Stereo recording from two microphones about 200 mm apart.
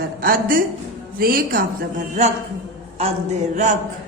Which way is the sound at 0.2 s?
45° right (ahead or behind).